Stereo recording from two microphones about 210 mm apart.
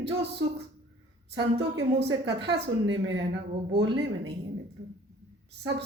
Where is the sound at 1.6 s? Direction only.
55° right (ahead or behind).